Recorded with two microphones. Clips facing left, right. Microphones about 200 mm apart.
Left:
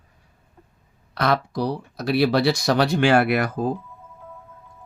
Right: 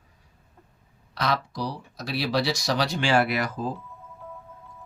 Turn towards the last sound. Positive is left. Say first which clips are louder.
# left 4 dB
turn(degrees=55)  # may be behind; listen again after turning